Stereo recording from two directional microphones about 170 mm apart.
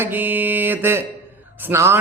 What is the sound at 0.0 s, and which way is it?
Speech, 10° right (ahead or behind).